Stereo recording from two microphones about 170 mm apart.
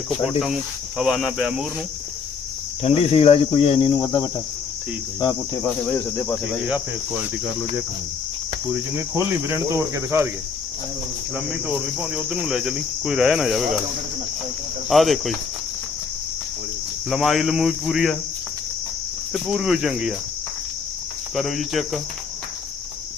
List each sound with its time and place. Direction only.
0.1 s cricket: 5° right (ahead or behind)
2.8 s speech: 35° left (ahead or behind)
5.6 s speech: 15° left (ahead or behind)
9.0 s cricket: 15° right (ahead or behind)
11.3 s cricket: 5° right (ahead or behind)
14.8 s cricket: centre (ahead or behind)
17.1 s cricket: centre (ahead or behind)
19.3 s cricket: centre (ahead or behind)
21.3 s cricket: centre (ahead or behind)